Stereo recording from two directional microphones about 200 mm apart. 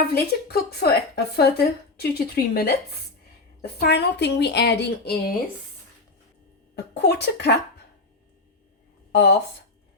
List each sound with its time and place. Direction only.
0.1 s a woman's voice: 50° left (ahead or behind)
6.7 s speech: 55° left (ahead or behind)
9.1 s speech: 60° left (ahead or behind)